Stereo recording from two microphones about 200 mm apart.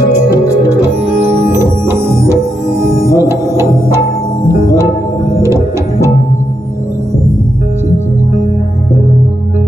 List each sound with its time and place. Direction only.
1.2 s music: 30° right (ahead or behind)
1.5 s music: 15° right (ahead or behind)